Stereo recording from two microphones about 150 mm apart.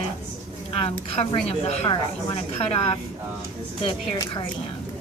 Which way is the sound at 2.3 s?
45° left (ahead or behind).